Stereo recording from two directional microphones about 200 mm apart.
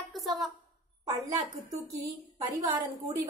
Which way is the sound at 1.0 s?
15° right (ahead or behind).